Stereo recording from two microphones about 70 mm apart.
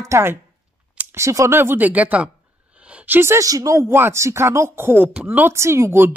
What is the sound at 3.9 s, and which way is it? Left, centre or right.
Speech, right.